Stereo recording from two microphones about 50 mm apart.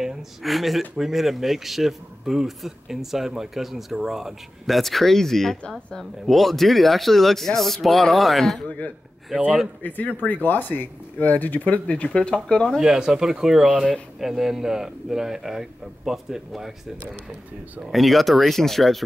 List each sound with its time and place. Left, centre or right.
0.0 s speech: centre
8.6 s speech: left
12.8 s a man's voice: centre
17.1 s speech: right
17.9 s speech: centre